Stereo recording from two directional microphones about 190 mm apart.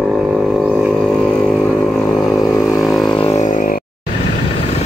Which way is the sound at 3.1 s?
35° left (ahead or behind).